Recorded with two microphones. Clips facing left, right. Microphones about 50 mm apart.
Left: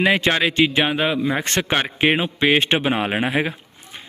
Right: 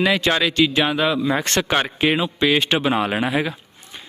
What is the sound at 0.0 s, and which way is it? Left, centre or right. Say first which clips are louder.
A man's voice: left 1 dB; left.